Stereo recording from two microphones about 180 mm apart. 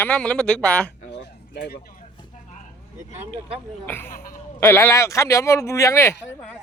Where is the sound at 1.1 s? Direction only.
70° left (ahead or behind).